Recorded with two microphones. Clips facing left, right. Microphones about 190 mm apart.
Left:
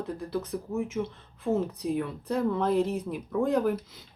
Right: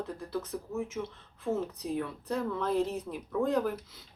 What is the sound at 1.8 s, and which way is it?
Speech, 15° left (ahead or behind).